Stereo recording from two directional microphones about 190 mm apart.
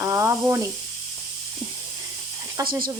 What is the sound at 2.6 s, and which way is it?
Speech, 20° right (ahead or behind).